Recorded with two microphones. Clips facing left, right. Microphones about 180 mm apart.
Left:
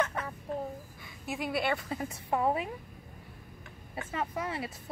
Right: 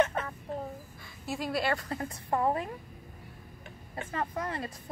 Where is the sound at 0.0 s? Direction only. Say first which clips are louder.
Right 4 dB; 25° right (ahead or behind).